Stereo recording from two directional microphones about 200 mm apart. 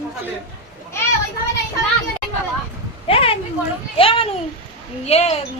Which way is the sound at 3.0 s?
30° left (ahead or behind).